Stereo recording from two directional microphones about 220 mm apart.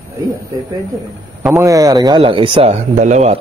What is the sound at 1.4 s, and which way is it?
Speech, 10° right (ahead or behind).